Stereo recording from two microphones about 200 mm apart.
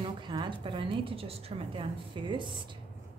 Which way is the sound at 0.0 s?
25° right (ahead or behind).